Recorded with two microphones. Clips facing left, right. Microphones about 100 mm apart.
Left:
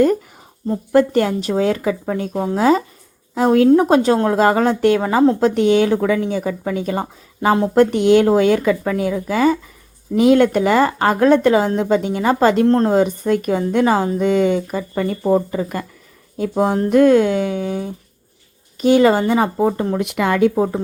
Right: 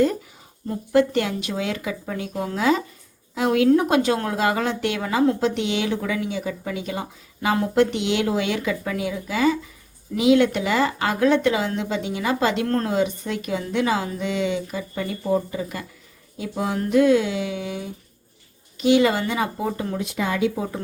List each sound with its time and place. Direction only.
0.9 s a woman's voice: 40° left (ahead or behind)
12.6 s speech: 25° left (ahead or behind)
12.9 s a woman's voice: 45° left (ahead or behind)
16.9 s a woman's voice: 50° left (ahead or behind)
20.0 s speech: 65° left (ahead or behind)